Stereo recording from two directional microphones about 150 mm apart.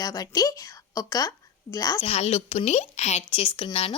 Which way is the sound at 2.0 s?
45° left (ahead or behind).